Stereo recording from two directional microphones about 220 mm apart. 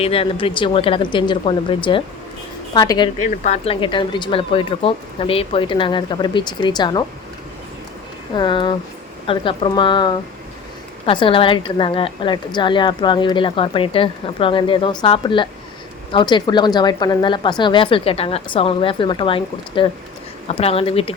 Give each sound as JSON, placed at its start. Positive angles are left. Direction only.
{"t": 0.0, "sound": "a woman's voice", "side_deg": 25}
{"t": 3.2, "sound": "a woman's voice", "side_deg": 30}
{"t": 8.4, "sound": "a woman's voice", "side_deg": 20}